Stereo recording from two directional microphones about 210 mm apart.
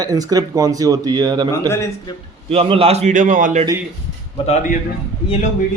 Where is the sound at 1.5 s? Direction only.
10° left (ahead or behind).